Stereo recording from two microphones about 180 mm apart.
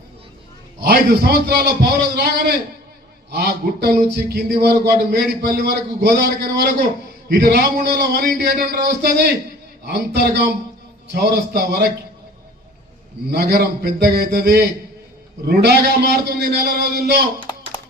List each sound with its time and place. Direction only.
0.9 s a man's voice: 60° right (ahead or behind)
3.3 s a man's voice: 60° right (ahead or behind)
13.3 s a man's voice: 60° right (ahead or behind)
17.5 s a sound: 25° left (ahead or behind)